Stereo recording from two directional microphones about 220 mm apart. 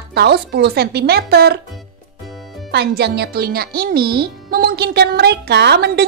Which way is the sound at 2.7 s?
50° right (ahead or behind).